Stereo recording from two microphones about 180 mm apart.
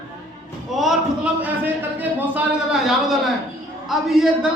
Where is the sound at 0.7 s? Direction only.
Centre (ahead or behind).